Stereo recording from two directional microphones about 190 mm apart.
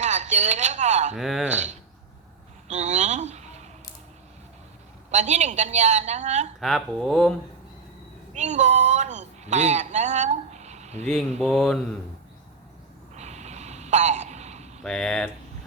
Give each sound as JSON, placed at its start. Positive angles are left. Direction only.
{"t": 0.0, "sound": "speech", "side_deg": -40}
{"t": 1.1, "sound": "speech", "side_deg": 0}
{"t": 2.6, "sound": "a sound", "side_deg": -40}
{"t": 5.1, "sound": "a woman's voice", "side_deg": -35}
{"t": 6.6, "sound": "speech", "side_deg": 0}
{"t": 8.3, "sound": "speech", "side_deg": -35}
{"t": 11.0, "sound": "speech", "side_deg": 5}
{"t": 13.1, "sound": "a sound", "side_deg": -35}
{"t": 14.8, "sound": "speech", "side_deg": 5}